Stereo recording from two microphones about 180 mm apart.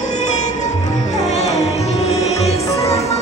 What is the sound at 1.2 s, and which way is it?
Music, 40° left (ahead or behind).